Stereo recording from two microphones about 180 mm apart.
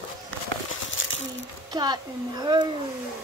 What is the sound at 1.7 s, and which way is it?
Speech, 25° right (ahead or behind).